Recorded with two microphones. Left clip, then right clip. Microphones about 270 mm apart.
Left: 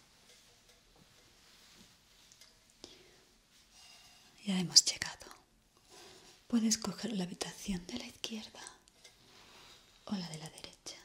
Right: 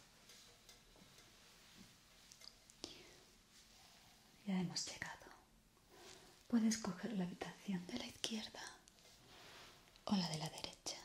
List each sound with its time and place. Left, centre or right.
2.8 s whispering: centre
4.5 s speech: left
6.5 s speech: centre
7.8 s speech: centre
10.0 s speech: centre